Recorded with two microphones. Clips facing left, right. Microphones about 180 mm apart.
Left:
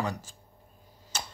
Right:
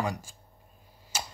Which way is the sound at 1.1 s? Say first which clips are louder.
Right 2 dB; 10° right (ahead or behind).